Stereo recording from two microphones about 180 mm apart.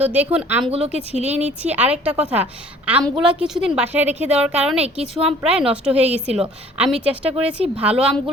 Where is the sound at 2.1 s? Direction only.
35° right (ahead or behind).